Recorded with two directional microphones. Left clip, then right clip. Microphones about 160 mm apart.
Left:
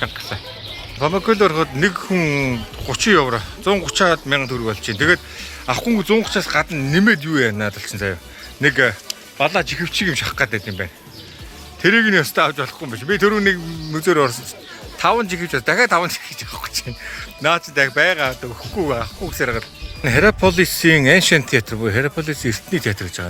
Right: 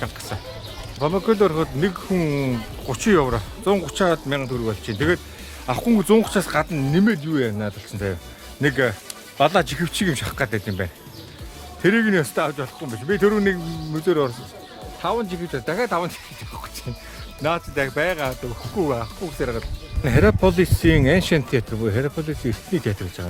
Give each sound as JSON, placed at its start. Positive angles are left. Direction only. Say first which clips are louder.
{"t": 0.9, "sound": "speech", "louder": "left 3 dB", "side_deg": 10}
{"t": 2.9, "sound": "speech", "louder": "left 4 dB", "side_deg": -10}
{"t": 6.1, "sound": "speech", "louder": "left 1 dB", "side_deg": -25}
{"t": 9.4, "sound": "speech", "louder": "even", "side_deg": -25}
{"t": 11.8, "sound": "speech", "louder": "left 5 dB", "side_deg": -5}
{"t": 13.9, "sound": "speech", "louder": "left 5 dB", "side_deg": 10}